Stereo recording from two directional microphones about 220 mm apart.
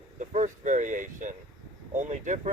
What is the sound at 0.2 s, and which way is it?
Speech, 35° right (ahead or behind).